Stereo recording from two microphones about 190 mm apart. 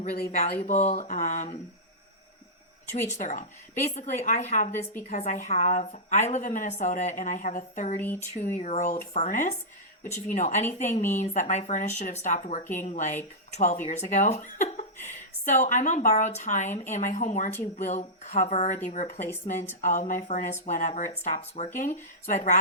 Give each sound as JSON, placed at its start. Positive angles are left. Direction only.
{"t": 0.0, "sound": "speech", "side_deg": 35}
{"t": 2.9, "sound": "speech", "side_deg": 40}
{"t": 19.8, "sound": "speech", "side_deg": 40}